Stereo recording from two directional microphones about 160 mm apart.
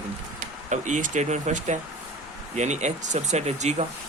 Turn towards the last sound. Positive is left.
turn(degrees=-45)  # may be behind; listen again after turning